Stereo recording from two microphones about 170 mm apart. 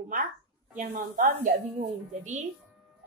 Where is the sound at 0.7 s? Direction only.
50° right (ahead or behind).